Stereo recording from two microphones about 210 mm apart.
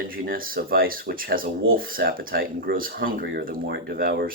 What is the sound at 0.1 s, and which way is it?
Speech, 45° right (ahead or behind).